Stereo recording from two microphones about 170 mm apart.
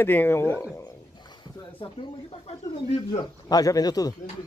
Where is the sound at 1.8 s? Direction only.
35° left (ahead or behind).